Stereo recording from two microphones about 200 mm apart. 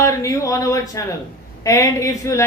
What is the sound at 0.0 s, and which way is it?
Speech, 15° left (ahead or behind).